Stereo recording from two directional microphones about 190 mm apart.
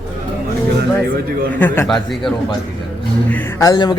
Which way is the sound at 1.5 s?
10° left (ahead or behind).